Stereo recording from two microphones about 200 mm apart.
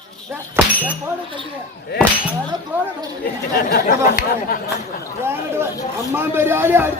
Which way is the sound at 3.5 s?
45° left (ahead or behind).